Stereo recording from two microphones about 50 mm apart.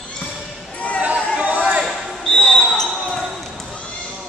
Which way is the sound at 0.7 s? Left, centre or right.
Left.